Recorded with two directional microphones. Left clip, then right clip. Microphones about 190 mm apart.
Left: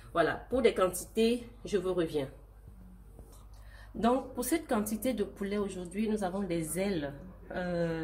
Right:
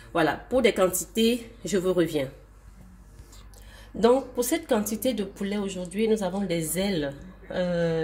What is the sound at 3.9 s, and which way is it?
Speech, 40° right (ahead or behind).